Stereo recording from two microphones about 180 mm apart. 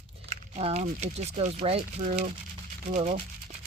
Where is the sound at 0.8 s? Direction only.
40° right (ahead or behind).